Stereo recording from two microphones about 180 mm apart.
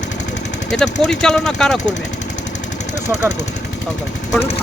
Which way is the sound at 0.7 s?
5° left (ahead or behind).